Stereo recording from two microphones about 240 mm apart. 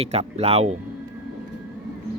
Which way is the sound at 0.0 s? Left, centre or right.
Right.